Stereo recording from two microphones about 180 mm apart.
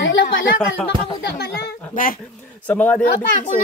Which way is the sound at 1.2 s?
60° left (ahead or behind).